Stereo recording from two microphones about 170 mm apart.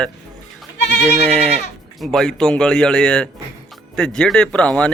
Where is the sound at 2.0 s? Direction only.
Centre (ahead or behind).